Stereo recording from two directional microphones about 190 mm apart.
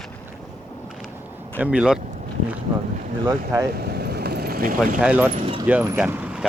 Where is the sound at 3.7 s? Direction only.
55° right (ahead or behind).